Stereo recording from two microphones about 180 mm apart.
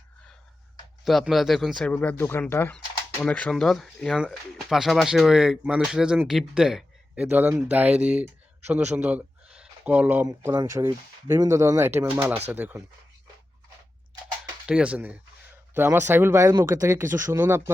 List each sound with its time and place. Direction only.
1.0 s speech: centre (ahead or behind)
14.7 s speech: 5° right (ahead or behind)